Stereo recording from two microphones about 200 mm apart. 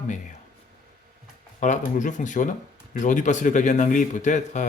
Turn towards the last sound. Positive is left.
turn(degrees=40)  # may be behind; listen again after turning